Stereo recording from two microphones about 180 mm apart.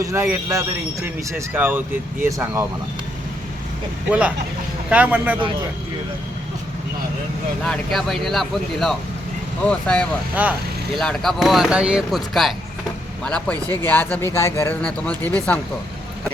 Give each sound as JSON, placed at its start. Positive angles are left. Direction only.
{"t": 0.0, "sound": "speech", "side_deg": -15}
{"t": 4.9, "sound": "speech", "side_deg": -10}
{"t": 7.6, "sound": "speech", "side_deg": 0}
{"t": 10.4, "sound": "speech", "side_deg": -10}
{"t": 10.9, "sound": "speech", "side_deg": 0}